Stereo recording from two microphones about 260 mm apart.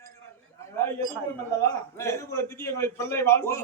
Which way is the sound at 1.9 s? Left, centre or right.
Centre.